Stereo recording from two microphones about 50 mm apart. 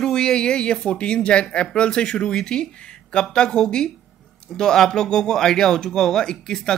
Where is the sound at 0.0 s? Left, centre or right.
Centre.